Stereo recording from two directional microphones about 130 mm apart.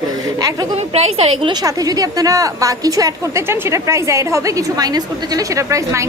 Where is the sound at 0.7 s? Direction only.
55° right (ahead or behind).